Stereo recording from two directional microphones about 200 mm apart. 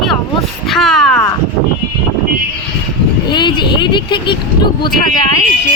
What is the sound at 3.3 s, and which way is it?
Speech, 20° left (ahead or behind).